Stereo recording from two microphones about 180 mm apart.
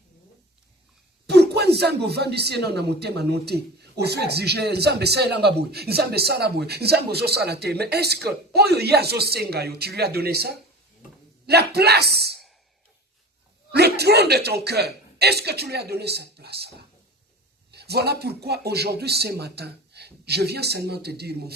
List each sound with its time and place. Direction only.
1.3 s a man's voice: 65° right (ahead or behind)
13.7 s speech: 65° right (ahead or behind)